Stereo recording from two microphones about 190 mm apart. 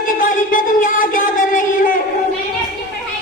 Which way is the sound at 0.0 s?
45° left (ahead or behind).